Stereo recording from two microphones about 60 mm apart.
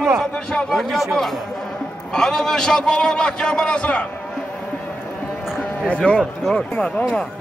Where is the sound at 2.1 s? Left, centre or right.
Centre.